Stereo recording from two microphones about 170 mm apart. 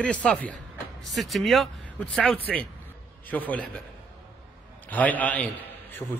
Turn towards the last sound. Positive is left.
turn(degrees=15)  # may be behind; listen again after turning